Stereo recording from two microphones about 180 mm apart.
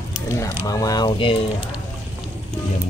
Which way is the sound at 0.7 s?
20° left (ahead or behind).